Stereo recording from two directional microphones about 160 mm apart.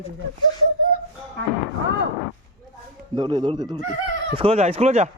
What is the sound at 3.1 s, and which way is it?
Speech, 30° right (ahead or behind).